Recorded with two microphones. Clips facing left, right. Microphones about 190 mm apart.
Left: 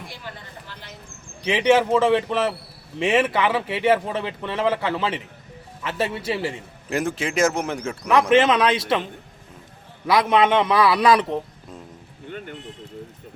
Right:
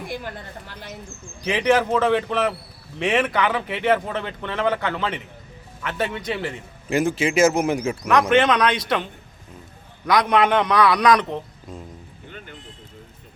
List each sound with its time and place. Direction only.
0.7 s speech: 50° right (ahead or behind)
1.5 s a man's voice: centre (ahead or behind)
10.1 s speech: 5° left (ahead or behind)